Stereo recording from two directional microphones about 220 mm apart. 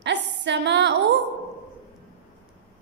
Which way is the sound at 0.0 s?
55° right (ahead or behind).